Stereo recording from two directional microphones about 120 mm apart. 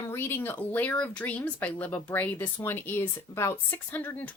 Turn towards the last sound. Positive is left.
turn(degrees=15)  # may be behind; listen again after turning